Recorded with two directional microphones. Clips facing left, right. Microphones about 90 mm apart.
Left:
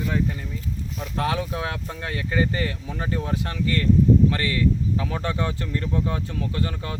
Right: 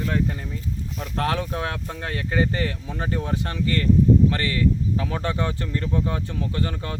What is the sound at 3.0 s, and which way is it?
Speech, 25° right (ahead or behind).